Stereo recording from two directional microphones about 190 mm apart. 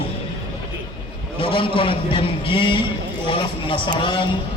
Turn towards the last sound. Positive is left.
turn(degrees=25)  # may be behind; listen again after turning